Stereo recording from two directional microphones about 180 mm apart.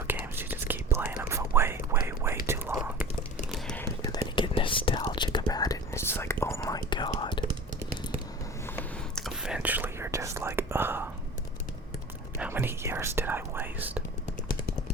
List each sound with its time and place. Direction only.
0.1 s whispering: 10° right (ahead or behind)
3.5 s whispering: 5° left (ahead or behind)
4.1 s whispering: 25° left (ahead or behind)
8.6 s a sound: 10° left (ahead or behind)
9.2 s whispering: 5° right (ahead or behind)
12.4 s whispering: 10° right (ahead or behind)